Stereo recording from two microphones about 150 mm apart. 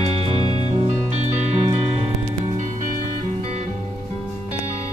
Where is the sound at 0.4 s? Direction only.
40° right (ahead or behind).